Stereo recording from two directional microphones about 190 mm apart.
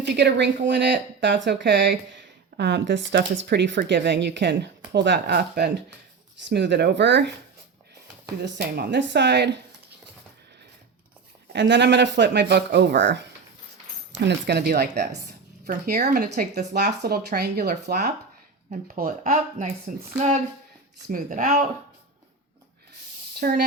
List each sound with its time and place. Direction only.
0.1 s a woman's voice: 65° right (ahead or behind)
8.4 s speech: 60° right (ahead or behind)
11.5 s speech: 70° right (ahead or behind); by 20.0 s 45° right (ahead or behind)
21.1 s speech: 45° right (ahead or behind)